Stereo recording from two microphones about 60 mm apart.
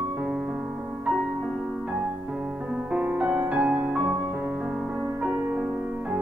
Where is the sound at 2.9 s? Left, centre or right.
Right.